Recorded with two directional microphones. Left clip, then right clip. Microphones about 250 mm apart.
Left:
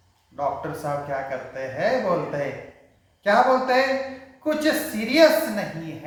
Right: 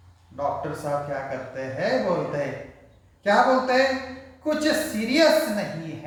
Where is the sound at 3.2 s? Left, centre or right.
Centre.